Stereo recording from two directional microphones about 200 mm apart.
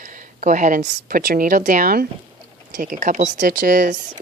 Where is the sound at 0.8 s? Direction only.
55° right (ahead or behind); by 4.0 s 40° right (ahead or behind).